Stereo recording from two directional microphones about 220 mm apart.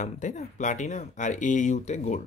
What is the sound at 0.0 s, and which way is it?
Speech, 35° left (ahead or behind).